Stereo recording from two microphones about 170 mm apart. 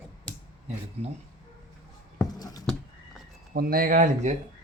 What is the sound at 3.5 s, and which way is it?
Speech, 60° right (ahead or behind).